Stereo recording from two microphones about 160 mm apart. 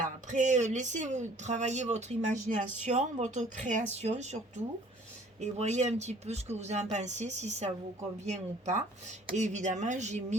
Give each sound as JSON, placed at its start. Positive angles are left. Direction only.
{"t": 0.0, "sound": "a woman's voice", "side_deg": -50}